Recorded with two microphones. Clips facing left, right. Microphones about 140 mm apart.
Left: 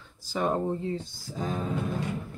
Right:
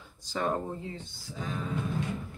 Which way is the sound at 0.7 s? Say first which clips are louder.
Left 8 dB; 35° left (ahead or behind).